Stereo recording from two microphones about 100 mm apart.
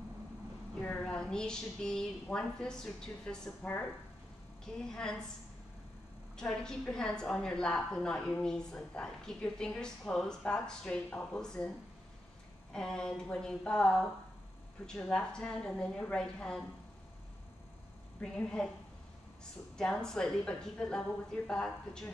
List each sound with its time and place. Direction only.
0.8 s a woman's voice: 10° left (ahead or behind)
3.6 s speech: 20° left (ahead or behind)
4.7 s a woman's voice: 5° left (ahead or behind)
6.3 s a woman's voice: 5° left (ahead or behind)
12.7 s a woman's voice: 5° left (ahead or behind)
18.2 s a woman's voice: 10° left (ahead or behind)
19.8 s a woman's voice: 5° left (ahead or behind)